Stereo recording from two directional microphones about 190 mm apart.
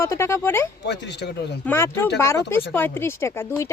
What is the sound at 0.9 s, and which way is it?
Speech, 65° left (ahead or behind).